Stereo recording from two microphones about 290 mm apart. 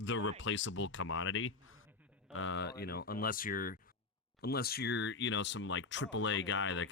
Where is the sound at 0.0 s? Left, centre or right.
Left.